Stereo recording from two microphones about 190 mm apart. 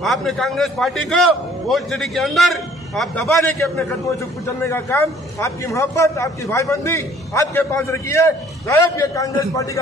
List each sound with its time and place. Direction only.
0.0 s a man's voice: centre (ahead or behind)
4.6 s a man's voice: 15° left (ahead or behind)